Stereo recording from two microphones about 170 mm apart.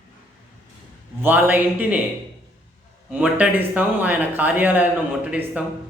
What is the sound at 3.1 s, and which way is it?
A man's voice, 5° right (ahead or behind).